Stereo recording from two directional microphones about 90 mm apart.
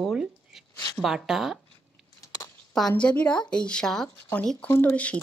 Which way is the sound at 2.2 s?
35° left (ahead or behind).